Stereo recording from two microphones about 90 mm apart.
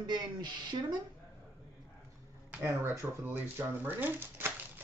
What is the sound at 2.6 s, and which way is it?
Speech, 30° right (ahead or behind).